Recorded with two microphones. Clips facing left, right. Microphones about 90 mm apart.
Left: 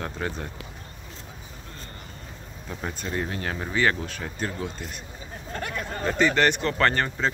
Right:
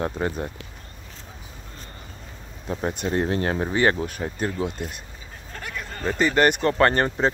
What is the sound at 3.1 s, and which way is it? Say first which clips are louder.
Speech: right 6 dB; 35° right (ahead or behind).